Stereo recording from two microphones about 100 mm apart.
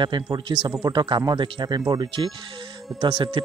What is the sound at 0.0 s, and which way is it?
Speech, 50° right (ahead or behind).